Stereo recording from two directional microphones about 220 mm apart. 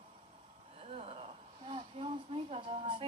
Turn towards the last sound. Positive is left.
turn(degrees=-25)  # may be behind; listen again after turning